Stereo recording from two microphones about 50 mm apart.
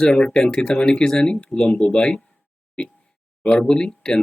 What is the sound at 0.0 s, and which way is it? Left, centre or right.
Speech, centre.